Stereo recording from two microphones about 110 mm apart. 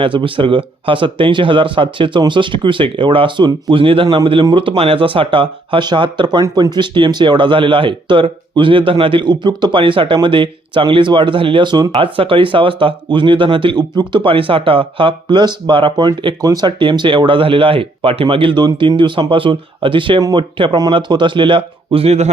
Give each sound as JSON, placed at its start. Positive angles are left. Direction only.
{"t": 0.0, "sound": "speech", "side_deg": -50}
{"t": 11.9, "sound": "speech", "side_deg": -50}